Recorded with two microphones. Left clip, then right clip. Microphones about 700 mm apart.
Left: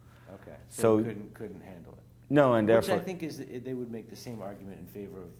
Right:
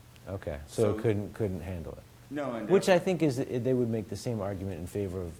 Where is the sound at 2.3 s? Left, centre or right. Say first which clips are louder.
Left 10 dB; left.